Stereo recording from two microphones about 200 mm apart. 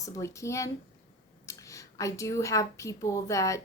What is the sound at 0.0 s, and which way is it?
A woman's voice, 15° left (ahead or behind).